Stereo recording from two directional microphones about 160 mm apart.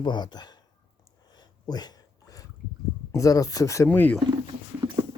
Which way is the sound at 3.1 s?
20° left (ahead or behind).